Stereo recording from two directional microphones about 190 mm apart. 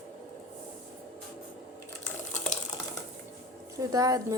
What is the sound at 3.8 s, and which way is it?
Speech, 20° right (ahead or behind).